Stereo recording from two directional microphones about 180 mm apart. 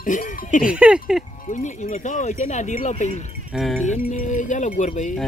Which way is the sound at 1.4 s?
40° left (ahead or behind).